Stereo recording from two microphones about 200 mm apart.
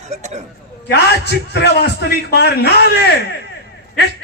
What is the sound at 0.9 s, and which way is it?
A man's voice, 55° left (ahead or behind).